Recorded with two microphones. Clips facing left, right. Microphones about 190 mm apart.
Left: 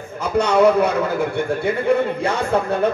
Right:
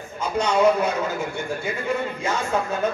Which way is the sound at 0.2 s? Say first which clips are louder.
Left 4 dB; 65° left (ahead or behind).